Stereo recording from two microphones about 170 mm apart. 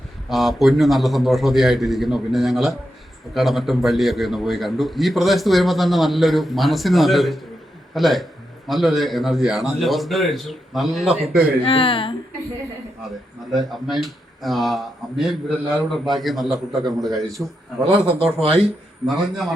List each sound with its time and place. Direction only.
0.3 s a man's voice: centre (ahead or behind)
11.6 s speech: 30° left (ahead or behind)
13.5 s a man's voice: centre (ahead or behind)
17.2 s a man's voice: 20° right (ahead or behind)
19.0 s a man's voice: centre (ahead or behind)